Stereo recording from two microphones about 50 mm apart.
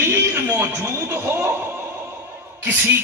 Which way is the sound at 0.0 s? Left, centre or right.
Right.